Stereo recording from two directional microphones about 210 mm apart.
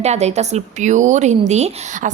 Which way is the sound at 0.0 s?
30° right (ahead or behind).